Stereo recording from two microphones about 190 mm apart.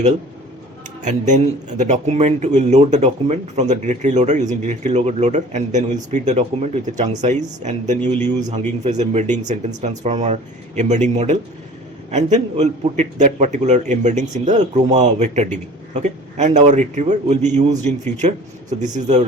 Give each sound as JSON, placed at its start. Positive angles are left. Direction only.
{"t": 1.0, "sound": "speech", "side_deg": -40}